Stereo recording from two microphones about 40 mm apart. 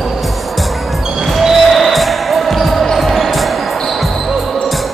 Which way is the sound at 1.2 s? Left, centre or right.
Centre.